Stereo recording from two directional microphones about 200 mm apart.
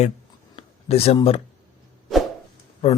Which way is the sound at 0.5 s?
30° left (ahead or behind).